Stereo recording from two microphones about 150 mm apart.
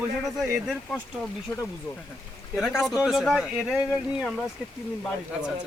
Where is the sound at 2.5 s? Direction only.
5° right (ahead or behind).